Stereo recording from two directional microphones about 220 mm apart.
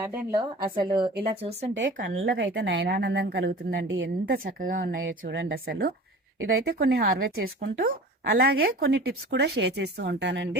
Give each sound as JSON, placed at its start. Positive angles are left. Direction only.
{"t": 0.1, "sound": "a woman's voice", "side_deg": -15}
{"t": 1.2, "sound": "speech", "side_deg": -25}
{"t": 1.7, "sound": "a woman's voice", "side_deg": -60}
{"t": 4.3, "sound": "a woman's voice", "side_deg": -40}
{"t": 4.8, "sound": "a woman's voice", "side_deg": -60}